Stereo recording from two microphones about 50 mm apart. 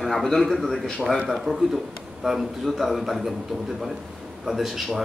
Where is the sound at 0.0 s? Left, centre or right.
Centre.